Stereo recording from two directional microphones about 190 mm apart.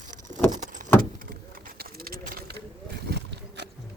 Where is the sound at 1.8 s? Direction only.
55° right (ahead or behind).